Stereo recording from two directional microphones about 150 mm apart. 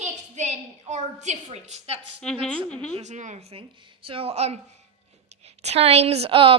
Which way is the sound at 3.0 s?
55° right (ahead or behind).